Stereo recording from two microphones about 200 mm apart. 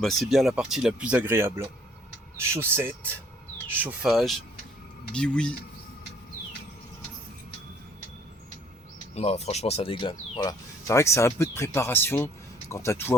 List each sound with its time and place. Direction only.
0.0 s speech: centre (ahead or behind)
9.1 s speech: 35° left (ahead or behind); by 13.1 s 15° left (ahead or behind)